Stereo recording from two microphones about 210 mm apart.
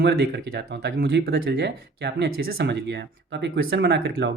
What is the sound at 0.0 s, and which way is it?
Speech, 50° right (ahead or behind).